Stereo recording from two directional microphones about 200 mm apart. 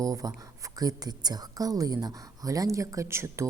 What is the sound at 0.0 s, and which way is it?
Speech, 15° right (ahead or behind).